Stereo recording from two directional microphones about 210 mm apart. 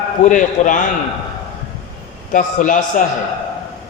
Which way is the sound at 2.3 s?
40° left (ahead or behind).